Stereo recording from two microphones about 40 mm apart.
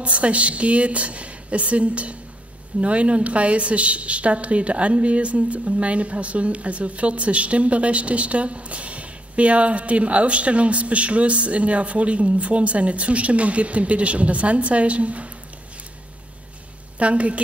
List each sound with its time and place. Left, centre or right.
0.0 s a woman's voice: right
17.0 s a woman's voice: right